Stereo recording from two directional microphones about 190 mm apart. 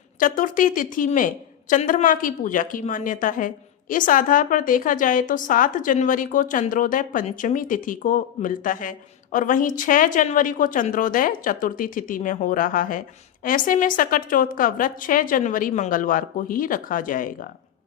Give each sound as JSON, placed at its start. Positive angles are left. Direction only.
{"t": 0.2, "sound": "a woman's voice", "side_deg": 45}